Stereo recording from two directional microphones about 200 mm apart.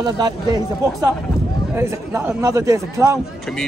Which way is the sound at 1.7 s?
10° right (ahead or behind).